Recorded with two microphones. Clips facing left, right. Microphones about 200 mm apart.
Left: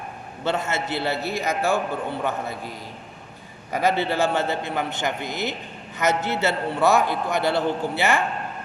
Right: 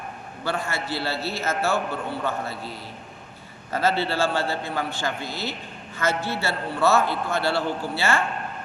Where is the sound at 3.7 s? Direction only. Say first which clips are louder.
Left 2 dB; 15° left (ahead or behind).